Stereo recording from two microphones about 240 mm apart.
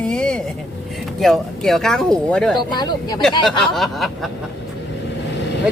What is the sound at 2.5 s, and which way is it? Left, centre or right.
Speech, centre.